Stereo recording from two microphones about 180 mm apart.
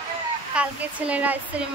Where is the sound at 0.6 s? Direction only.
5° right (ahead or behind).